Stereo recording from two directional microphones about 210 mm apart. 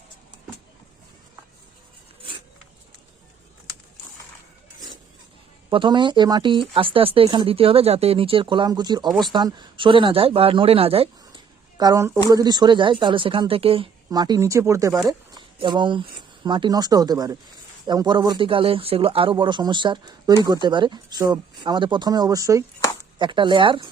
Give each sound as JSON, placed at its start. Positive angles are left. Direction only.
{"t": 5.7, "sound": "speech", "side_deg": -20}
{"t": 11.8, "sound": "speech", "side_deg": -15}